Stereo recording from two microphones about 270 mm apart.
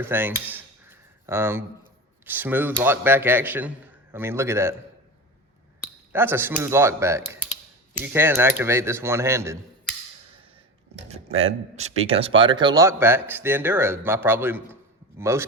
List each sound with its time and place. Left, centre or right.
0.0 s a sound: centre
2.2 s speech: centre
6.1 s speech: centre
11.1 s a man's voice: right